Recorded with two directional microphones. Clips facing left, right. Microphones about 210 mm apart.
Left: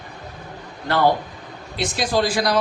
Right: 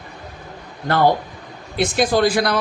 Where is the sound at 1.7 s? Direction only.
55° right (ahead or behind).